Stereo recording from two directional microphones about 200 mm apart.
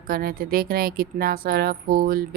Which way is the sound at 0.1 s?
45° right (ahead or behind).